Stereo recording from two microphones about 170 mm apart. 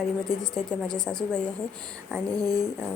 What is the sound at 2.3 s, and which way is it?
Speech, 20° right (ahead or behind).